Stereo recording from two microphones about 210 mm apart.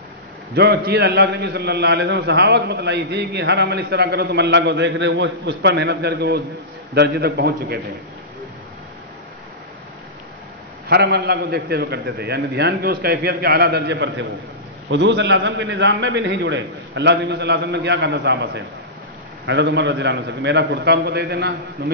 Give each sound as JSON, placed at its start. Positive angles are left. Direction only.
{"t": 0.6, "sound": "a man's voice", "side_deg": -50}
{"t": 10.9, "sound": "a man's voice", "side_deg": -50}